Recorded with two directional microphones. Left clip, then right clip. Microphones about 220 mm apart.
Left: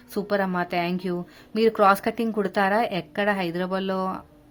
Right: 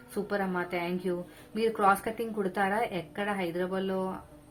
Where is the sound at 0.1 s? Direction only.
50° left (ahead or behind).